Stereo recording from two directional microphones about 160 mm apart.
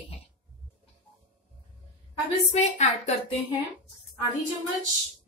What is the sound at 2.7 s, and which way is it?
Speech, 45° left (ahead or behind).